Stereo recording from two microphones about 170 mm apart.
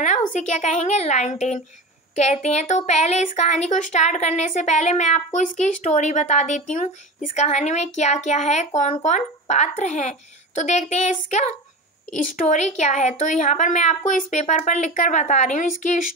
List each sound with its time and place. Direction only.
0.0 s a woman's voice: 45° left (ahead or behind)